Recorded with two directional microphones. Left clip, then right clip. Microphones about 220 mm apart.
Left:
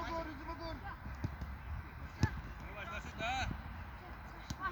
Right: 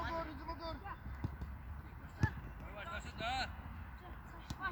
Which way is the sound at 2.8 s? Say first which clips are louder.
Left 1 dB; 10° right (ahead or behind).